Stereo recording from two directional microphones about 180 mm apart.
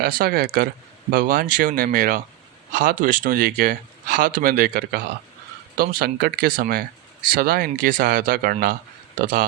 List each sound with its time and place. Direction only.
0.0 s speech: 55° right (ahead or behind)